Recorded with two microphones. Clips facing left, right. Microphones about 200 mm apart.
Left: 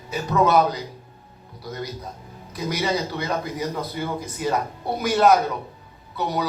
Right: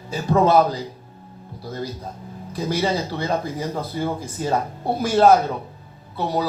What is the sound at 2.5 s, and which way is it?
Speech, 30° right (ahead or behind).